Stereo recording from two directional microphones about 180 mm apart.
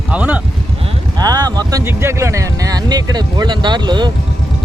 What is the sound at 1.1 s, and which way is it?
Speech, 20° right (ahead or behind).